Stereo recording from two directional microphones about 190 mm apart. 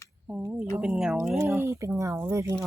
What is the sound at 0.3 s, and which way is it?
Speech, 5° right (ahead or behind).